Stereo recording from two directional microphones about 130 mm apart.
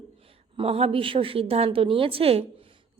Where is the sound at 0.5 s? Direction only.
50° right (ahead or behind).